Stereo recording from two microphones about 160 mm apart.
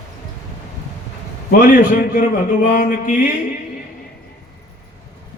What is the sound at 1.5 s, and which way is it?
A man's voice, 60° left (ahead or behind).